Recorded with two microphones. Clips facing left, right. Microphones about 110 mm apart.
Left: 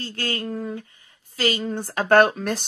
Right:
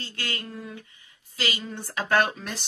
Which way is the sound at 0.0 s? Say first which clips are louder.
Left 7 dB; 40° left (ahead or behind).